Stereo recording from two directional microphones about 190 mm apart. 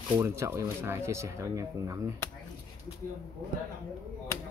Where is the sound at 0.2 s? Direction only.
15° right (ahead or behind).